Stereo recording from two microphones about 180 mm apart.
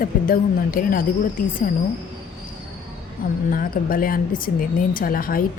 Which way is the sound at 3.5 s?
50° left (ahead or behind).